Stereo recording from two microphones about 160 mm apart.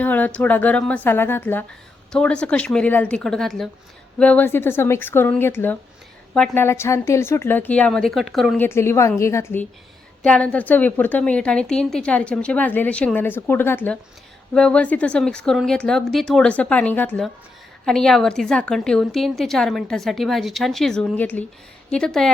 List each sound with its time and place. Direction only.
0.0 s a woman's voice: 10° left (ahead or behind)
8.5 s a woman's voice: 15° left (ahead or behind)